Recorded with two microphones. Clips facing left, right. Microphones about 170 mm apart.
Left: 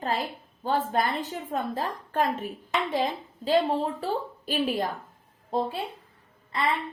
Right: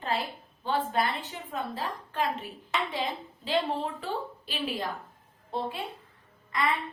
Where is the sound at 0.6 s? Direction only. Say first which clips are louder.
Left 2 dB; 40° left (ahead or behind).